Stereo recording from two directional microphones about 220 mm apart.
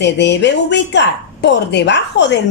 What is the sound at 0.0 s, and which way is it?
A woman's voice, 50° left (ahead or behind).